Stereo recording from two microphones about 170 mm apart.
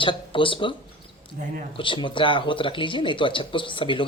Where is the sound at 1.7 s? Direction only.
30° left (ahead or behind).